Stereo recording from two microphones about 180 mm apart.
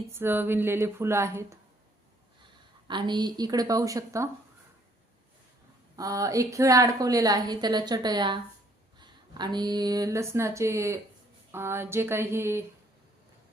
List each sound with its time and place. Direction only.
0.1 s speech: 10° right (ahead or behind)
2.4 s a woman's voice: 25° right (ahead or behind)
6.0 s a woman's voice: 20° right (ahead or behind)